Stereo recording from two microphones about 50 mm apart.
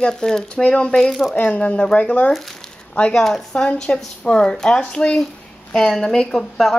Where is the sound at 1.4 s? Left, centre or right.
Left.